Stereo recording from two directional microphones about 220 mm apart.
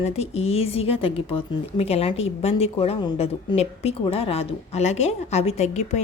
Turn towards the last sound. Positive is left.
turn(degrees=30)  # may be behind; listen again after turning